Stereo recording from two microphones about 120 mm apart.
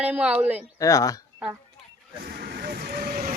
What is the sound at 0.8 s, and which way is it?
Speech, 30° left (ahead or behind).